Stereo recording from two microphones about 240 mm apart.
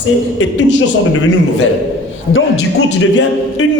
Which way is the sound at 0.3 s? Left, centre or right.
Left.